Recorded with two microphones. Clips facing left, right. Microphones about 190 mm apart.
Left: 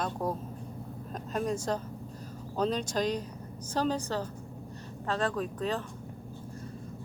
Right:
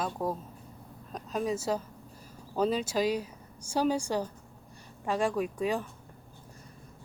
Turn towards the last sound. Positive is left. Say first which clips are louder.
# right 2 dB
turn(degrees=-10)  # may be behind; listen again after turning